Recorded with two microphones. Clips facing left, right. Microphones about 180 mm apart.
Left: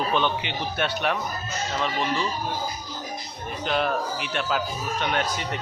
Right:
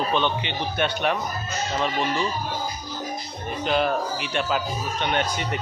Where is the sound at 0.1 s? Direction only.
5° left (ahead or behind).